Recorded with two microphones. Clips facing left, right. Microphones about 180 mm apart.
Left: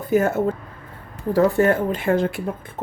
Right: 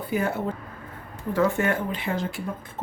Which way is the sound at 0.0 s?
45° left (ahead or behind).